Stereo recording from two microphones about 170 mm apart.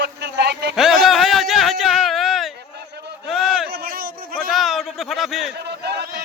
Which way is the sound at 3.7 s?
60° right (ahead or behind).